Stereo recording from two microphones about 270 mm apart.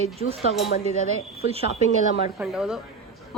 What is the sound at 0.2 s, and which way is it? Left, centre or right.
A woman's voice, right.